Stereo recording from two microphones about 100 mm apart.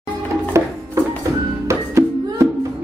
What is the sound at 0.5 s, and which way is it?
Music, 30° right (ahead or behind).